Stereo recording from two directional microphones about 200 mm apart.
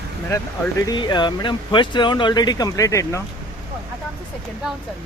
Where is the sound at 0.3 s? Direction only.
15° left (ahead or behind).